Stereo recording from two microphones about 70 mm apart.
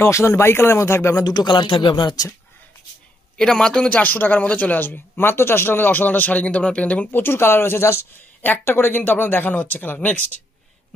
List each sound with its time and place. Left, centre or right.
0.0 s speech: left
1.2 s speech: left
3.3 s speech: centre
7.1 s speech: left
8.4 s speech: left